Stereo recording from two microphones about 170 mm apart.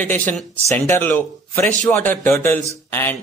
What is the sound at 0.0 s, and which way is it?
A man's voice, 10° left (ahead or behind).